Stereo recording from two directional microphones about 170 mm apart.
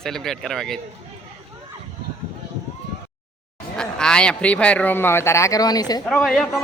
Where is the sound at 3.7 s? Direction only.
5° left (ahead or behind); by 6.0 s 25° left (ahead or behind).